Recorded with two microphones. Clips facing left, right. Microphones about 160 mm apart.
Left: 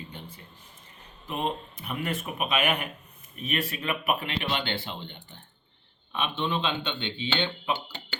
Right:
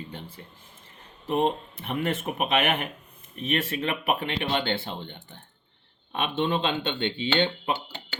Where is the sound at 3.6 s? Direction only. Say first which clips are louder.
Right 2 dB; 25° right (ahead or behind).